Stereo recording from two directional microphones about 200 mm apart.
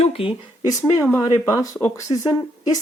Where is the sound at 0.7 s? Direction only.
15° left (ahead or behind).